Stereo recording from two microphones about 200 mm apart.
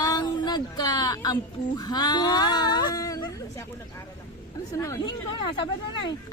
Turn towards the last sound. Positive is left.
turn(degrees=20)  # may be behind; listen again after turning